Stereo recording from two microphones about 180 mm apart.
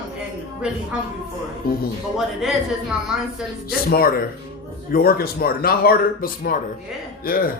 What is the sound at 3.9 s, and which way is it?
Speech, 55° left (ahead or behind).